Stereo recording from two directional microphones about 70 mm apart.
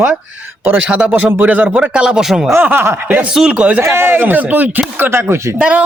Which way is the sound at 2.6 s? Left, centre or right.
Right.